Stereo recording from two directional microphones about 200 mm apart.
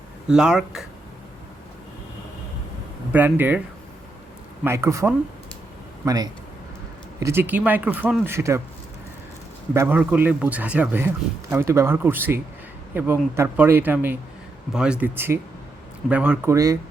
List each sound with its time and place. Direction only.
0.3 s speech: 5° right (ahead or behind)
3.1 s speech: 10° right (ahead or behind)
4.6 s a man's voice: 15° right (ahead or behind)
9.7 s speech: 10° right (ahead or behind)